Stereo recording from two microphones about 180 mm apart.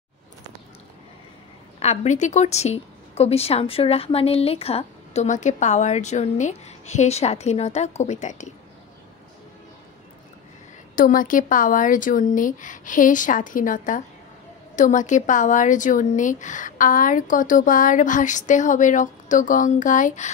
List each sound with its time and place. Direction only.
1.8 s a woman's voice: 40° left (ahead or behind)
11.0 s speech: 50° left (ahead or behind)